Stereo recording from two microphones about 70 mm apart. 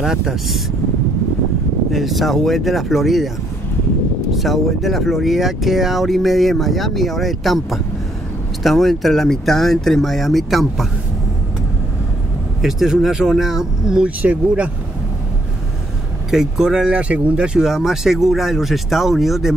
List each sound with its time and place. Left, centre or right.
0.0 s speech: centre
1.9 s speech: centre
4.3 s speech: centre
12.6 s speech: centre
14.2 s speech: right
16.3 s speech: centre